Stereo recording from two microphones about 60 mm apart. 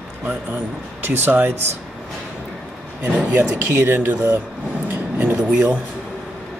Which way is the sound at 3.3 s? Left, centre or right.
Right.